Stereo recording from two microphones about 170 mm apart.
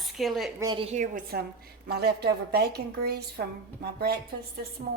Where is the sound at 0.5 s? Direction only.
25° right (ahead or behind).